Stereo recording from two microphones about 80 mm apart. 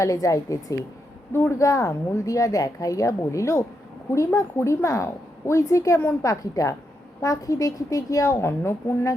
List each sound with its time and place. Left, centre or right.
0.0 s a woman's voice: left